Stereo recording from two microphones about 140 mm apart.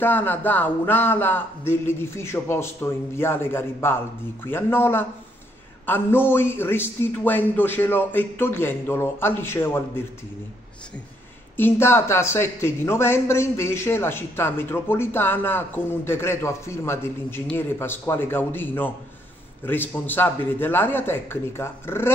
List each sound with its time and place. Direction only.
0.0 s a man's voice: 15° left (ahead or behind)
11.5 s a man's voice: 15° left (ahead or behind)